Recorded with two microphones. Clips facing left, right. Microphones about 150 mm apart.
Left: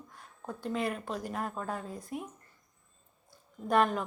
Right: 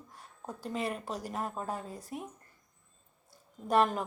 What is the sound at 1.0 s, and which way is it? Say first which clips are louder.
Speech: left 2 dB; 35° right (ahead or behind).